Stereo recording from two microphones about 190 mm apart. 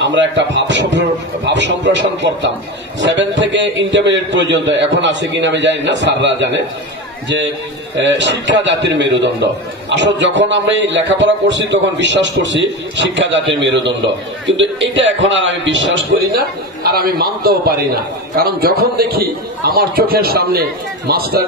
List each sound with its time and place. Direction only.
0.0 s a man's voice: 70° right (ahead or behind)
7.9 s a man's voice: 70° right (ahead or behind)
16.2 s a man's voice: 55° right (ahead or behind)